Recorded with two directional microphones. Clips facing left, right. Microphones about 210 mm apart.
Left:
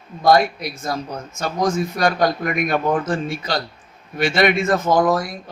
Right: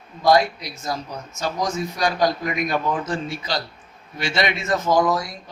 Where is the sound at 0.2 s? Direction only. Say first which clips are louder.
Left 2 dB; 50° left (ahead or behind).